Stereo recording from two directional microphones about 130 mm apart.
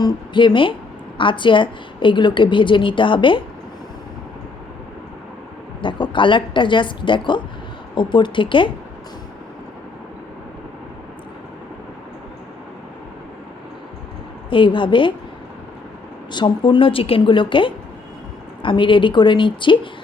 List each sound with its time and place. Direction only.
0.0 s a woman's voice: 35° left (ahead or behind)
5.8 s a woman's voice: 40° left (ahead or behind)
14.5 s a woman's voice: 40° left (ahead or behind)
16.3 s a woman's voice: 35° left (ahead or behind)